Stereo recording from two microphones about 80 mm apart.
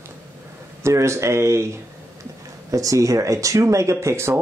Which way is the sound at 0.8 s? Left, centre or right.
Right.